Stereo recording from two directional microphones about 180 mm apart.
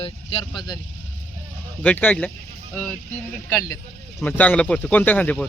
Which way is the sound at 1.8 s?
10° left (ahead or behind).